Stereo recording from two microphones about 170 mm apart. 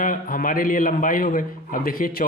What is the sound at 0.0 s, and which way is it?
Speech, 55° left (ahead or behind).